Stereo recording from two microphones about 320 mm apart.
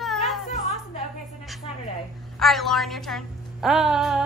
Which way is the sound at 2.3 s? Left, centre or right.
Centre.